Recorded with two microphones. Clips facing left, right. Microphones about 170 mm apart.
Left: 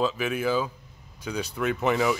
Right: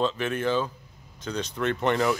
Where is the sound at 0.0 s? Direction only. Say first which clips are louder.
Even; 5° left (ahead or behind).